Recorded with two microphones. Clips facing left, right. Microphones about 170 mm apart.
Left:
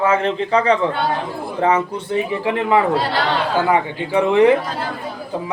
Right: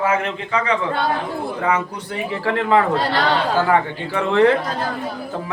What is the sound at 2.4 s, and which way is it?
A man's voice, 15° left (ahead or behind).